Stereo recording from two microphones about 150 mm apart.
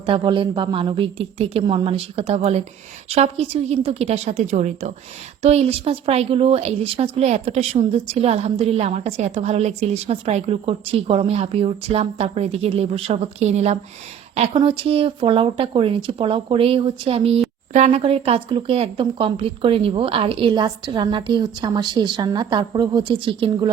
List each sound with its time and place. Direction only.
0.0 s speech: 35° right (ahead or behind)
14.5 s speech: 35° right (ahead or behind)